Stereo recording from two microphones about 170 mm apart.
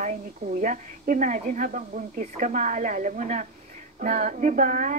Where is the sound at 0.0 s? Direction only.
50° right (ahead or behind).